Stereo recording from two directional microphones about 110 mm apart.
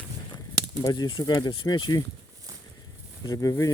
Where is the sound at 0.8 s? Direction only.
40° left (ahead or behind).